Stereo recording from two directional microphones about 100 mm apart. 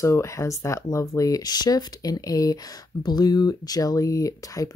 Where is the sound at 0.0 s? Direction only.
30° left (ahead or behind).